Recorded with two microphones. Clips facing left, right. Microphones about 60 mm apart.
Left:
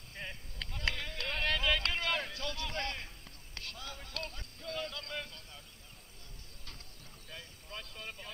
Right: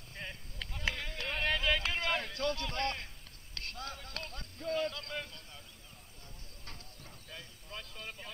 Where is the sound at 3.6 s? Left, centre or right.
Right; by 5.1 s centre.